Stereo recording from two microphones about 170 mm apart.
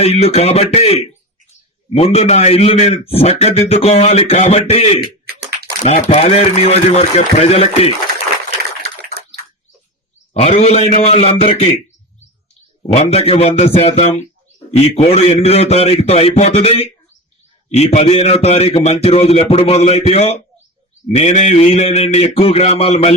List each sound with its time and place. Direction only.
0.0 s a man's voice: 35° left (ahead or behind)
10.4 s a man's voice: 40° left (ahead or behind)
12.8 s a man's voice: 40° left (ahead or behind)